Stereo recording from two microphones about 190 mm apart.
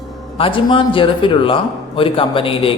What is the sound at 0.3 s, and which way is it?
A man's voice, 25° left (ahead or behind).